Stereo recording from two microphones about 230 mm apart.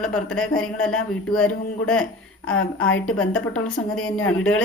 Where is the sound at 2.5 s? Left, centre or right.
Left.